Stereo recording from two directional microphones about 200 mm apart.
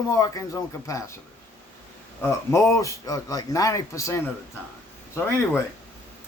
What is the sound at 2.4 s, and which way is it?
Speech, 15° left (ahead or behind).